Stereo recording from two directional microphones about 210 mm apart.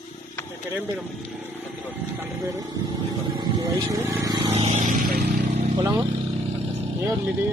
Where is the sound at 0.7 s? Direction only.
10° right (ahead or behind).